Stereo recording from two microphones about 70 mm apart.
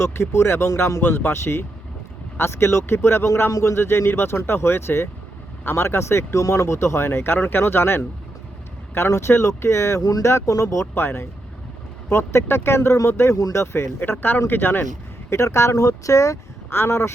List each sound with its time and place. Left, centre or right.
0.0 s speech: left
0.8 s speech: left
1.0 s speech: left
10.0 s speech: left
10.2 s speech: left
10.9 s speech: left
15.3 s speech: left
16.7 s speech: left